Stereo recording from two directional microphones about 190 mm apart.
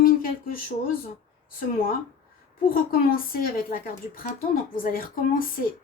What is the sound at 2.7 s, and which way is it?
Speech, 50° left (ahead or behind).